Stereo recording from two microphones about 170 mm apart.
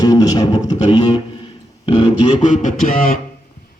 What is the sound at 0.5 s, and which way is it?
Music, 40° left (ahead or behind).